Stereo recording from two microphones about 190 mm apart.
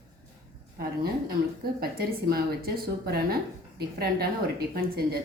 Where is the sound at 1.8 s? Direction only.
55° right (ahead or behind).